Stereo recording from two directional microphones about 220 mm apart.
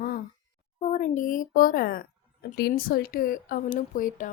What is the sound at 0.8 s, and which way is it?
Speech, 30° left (ahead or behind).